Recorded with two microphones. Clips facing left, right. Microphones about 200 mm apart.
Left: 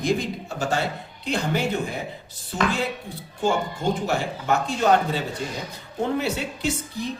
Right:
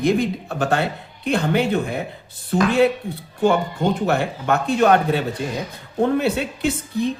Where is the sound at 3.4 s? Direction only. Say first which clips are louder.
Right 5 dB; 60° right (ahead or behind).